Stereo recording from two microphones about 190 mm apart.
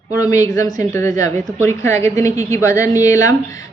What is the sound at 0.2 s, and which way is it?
A woman's voice, 20° left (ahead or behind).